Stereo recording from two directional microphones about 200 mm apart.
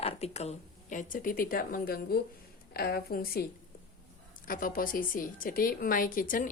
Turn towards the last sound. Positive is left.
turn(degrees=40)  # may be behind; listen again after turning